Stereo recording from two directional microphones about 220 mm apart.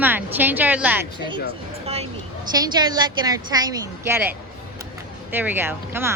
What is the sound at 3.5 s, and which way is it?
A woman's voice, 15° right (ahead or behind).